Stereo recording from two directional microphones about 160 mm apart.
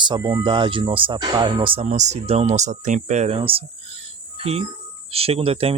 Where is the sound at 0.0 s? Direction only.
25° right (ahead or behind).